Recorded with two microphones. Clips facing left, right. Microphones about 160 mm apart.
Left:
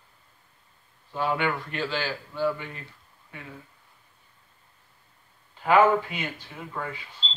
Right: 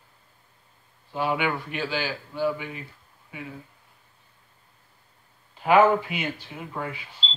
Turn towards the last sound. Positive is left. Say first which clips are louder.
# right 2 dB
turn(degrees=-15)  # may be behind; listen again after turning